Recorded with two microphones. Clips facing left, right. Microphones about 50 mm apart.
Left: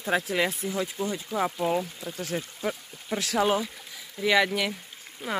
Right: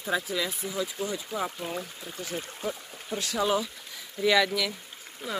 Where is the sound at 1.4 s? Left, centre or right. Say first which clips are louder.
Left 6 dB; left.